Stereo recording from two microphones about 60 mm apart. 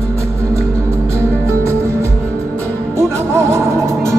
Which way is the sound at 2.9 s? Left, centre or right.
Right.